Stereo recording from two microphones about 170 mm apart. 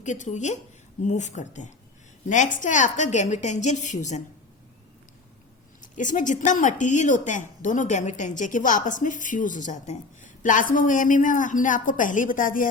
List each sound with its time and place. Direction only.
0.0 s speech: 45° left (ahead or behind)
5.8 s speech: 50° left (ahead or behind)